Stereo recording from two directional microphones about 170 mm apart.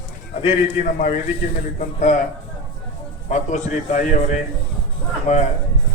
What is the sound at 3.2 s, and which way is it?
Speech, 45° left (ahead or behind).